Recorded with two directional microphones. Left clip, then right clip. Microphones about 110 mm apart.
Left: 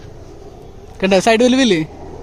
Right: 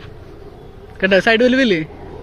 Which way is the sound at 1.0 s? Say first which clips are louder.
Even; 40° left (ahead or behind).